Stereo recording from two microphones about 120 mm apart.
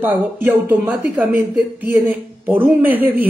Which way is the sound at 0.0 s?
15° right (ahead or behind).